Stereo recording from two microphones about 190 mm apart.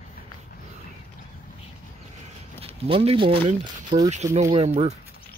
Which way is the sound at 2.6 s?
30° right (ahead or behind).